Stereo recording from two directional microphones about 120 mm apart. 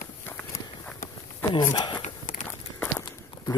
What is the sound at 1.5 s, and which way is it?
Speech, 35° left (ahead or behind).